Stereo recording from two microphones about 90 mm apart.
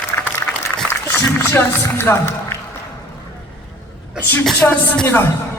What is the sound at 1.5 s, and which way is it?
A man's voice, 25° left (ahead or behind).